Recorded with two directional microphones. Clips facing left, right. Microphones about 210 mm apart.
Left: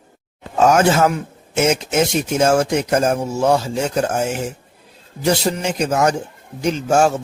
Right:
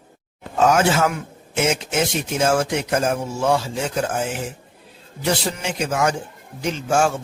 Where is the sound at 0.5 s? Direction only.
40° left (ahead or behind).